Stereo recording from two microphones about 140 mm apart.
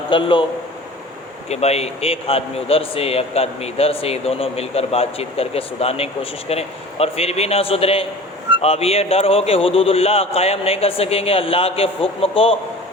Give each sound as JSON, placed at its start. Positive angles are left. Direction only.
{"t": 0.1, "sound": "a man's voice", "side_deg": 35}
{"t": 1.5, "sound": "a man's voice", "side_deg": 50}